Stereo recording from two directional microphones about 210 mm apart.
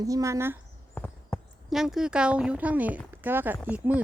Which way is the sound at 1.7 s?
Centre (ahead or behind).